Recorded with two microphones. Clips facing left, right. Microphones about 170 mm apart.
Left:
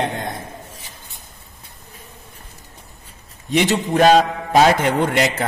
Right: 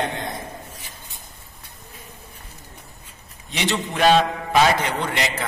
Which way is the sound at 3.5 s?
45° left (ahead or behind).